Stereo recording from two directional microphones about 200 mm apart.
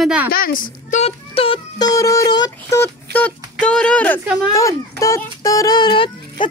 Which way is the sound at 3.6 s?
5° left (ahead or behind).